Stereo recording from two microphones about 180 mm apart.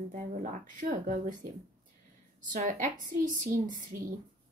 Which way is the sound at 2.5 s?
45° right (ahead or behind).